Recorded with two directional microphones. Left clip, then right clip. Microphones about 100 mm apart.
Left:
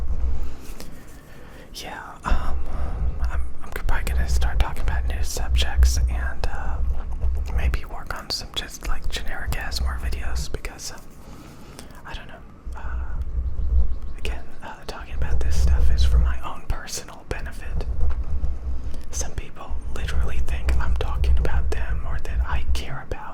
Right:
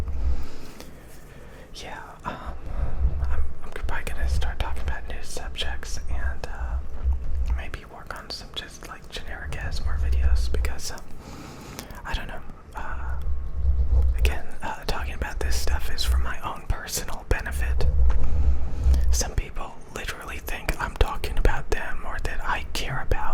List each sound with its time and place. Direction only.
1.7 s whispering: 15° left (ahead or behind); by 8.9 s 30° left (ahead or behind)
8.9 s speech: 20° left (ahead or behind)
10.5 s speech: 10° right (ahead or behind)
11.8 s whispering: 35° right (ahead or behind)
14.2 s whispering: 35° right (ahead or behind)
16.4 s whispering: 15° right (ahead or behind)
16.9 s whispering: 25° right (ahead or behind)
18.9 s whispering: 35° right (ahead or behind)